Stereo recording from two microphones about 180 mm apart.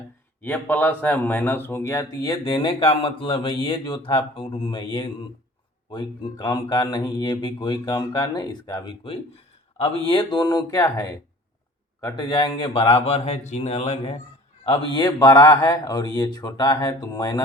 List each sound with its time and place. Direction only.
0.4 s speech: 10° left (ahead or behind); by 14.2 s 40° left (ahead or behind)
14.6 s speech: 30° left (ahead or behind)